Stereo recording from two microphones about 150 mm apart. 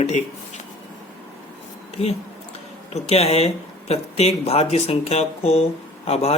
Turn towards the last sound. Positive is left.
turn(degrees=40)  # may be behind; listen again after turning